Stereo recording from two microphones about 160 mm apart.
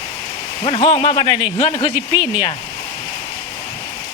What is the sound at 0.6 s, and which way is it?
Speech, 35° left (ahead or behind).